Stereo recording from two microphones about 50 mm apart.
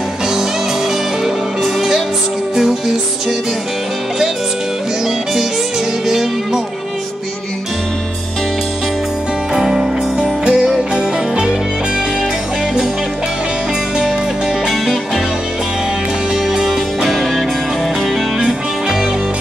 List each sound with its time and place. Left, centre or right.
1.2 s music: centre
6.0 s music: centre
9.5 s music: centre
16.4 s music: centre